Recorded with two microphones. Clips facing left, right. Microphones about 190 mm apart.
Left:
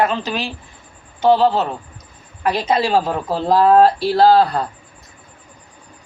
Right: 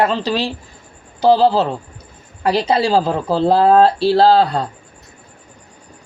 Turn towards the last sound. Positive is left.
turn(degrees=-25)  # may be behind; listen again after turning